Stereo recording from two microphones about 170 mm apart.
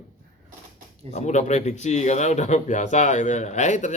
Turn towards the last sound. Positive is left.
turn(degrees=45)  # may be behind; listen again after turning